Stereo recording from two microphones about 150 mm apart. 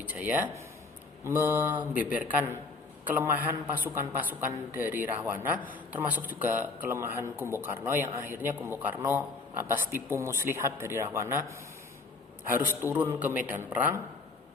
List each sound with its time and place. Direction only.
0.1 s speech: 10° right (ahead or behind)
12.5 s speech: 15° right (ahead or behind)